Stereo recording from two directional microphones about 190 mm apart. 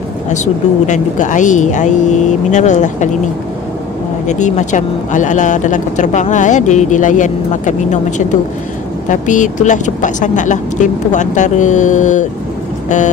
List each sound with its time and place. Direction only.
0.8 s speech: 40° left (ahead or behind)
4.3 s speech: 40° left (ahead or behind)